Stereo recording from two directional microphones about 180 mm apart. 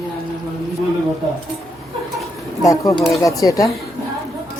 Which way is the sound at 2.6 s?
20° left (ahead or behind).